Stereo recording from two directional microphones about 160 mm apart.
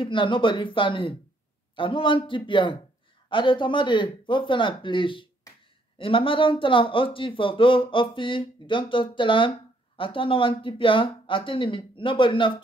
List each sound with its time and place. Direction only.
0.0 s speech: 30° left (ahead or behind)